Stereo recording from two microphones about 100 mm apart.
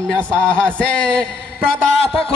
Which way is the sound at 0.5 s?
10° left (ahead or behind).